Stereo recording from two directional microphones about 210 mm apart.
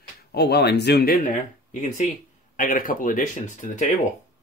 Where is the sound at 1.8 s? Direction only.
35° left (ahead or behind).